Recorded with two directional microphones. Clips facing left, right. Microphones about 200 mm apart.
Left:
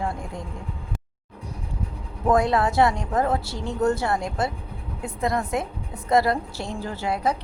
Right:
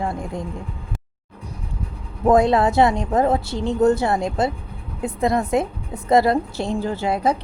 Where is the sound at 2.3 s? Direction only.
20° right (ahead or behind).